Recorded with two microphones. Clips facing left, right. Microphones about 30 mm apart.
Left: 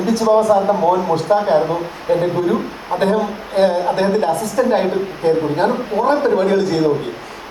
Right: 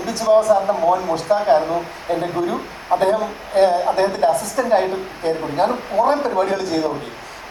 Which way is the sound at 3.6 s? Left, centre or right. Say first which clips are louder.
Left 1 dB; left.